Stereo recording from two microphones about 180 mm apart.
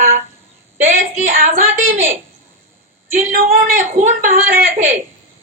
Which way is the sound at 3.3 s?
50° right (ahead or behind).